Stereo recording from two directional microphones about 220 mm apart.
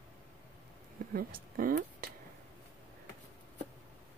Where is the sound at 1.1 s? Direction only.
40° right (ahead or behind).